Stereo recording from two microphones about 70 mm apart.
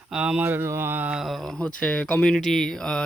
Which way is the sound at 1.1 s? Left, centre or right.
Centre.